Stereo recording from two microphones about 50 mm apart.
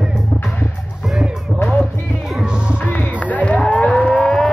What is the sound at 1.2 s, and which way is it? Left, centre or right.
Music, centre.